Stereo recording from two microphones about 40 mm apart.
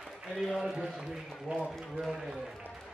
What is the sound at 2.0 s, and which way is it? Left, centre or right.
Speech, centre.